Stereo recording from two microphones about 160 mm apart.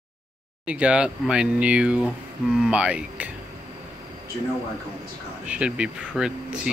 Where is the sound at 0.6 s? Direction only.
10° right (ahead or behind).